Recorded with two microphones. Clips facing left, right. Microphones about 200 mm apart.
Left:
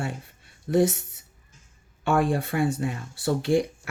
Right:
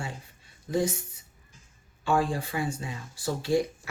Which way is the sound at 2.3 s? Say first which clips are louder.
Left 6 dB; 65° left (ahead or behind).